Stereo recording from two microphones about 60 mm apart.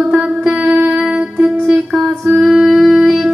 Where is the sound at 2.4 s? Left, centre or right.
Centre.